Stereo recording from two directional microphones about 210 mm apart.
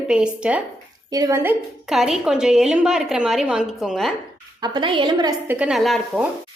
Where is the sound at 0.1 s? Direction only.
5° right (ahead or behind).